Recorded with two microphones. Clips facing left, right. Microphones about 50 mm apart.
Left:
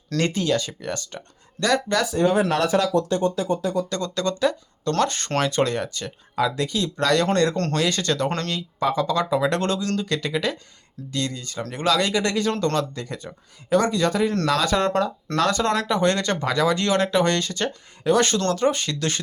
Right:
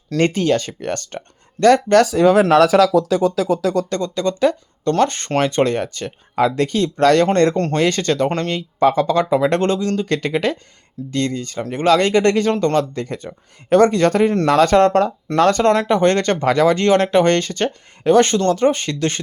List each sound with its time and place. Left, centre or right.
0.2 s speech: right
2.0 s speech: right
2.4 s speech: right
3.4 s speech: right
4.0 s speech: right
7.5 s speech: centre
7.8 s speech: right
8.3 s speech: right
8.8 s speech: right